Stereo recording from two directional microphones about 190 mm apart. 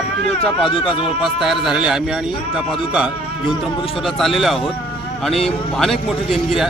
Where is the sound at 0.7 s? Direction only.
30° left (ahead or behind).